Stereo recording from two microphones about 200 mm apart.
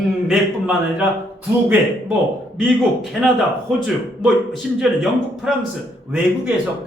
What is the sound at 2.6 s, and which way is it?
A man's voice, centre (ahead or behind).